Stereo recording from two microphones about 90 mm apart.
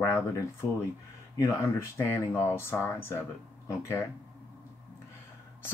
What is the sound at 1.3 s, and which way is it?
Speech, 30° left (ahead or behind).